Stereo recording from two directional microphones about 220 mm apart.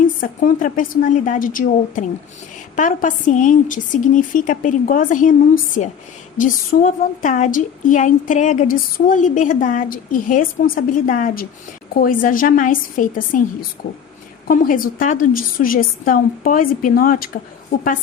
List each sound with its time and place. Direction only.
0.0 s a woman's voice: 40° left (ahead or behind)
6.3 s a woman's voice: 35° left (ahead or behind)